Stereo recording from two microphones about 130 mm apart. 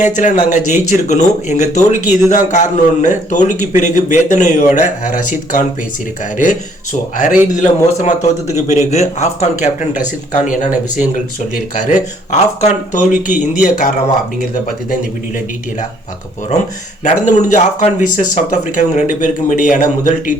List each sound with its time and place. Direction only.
0.0 s a man's voice: 75° left (ahead or behind)
10.3 s a man's voice: 85° left
10.9 s a man's voice: 70° left (ahead or behind)
12.3 s a man's voice: 70° left (ahead or behind); by 13.9 s 90° left
17.0 s a man's voice: 70° left (ahead or behind)